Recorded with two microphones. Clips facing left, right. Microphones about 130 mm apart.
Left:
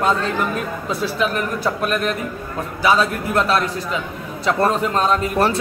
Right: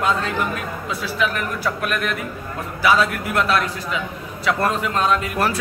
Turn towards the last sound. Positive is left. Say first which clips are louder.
# left 3 dB
turn(degrees=30)  # may be behind; listen again after turning